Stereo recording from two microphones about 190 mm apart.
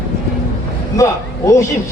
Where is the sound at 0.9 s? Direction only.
15° left (ahead or behind).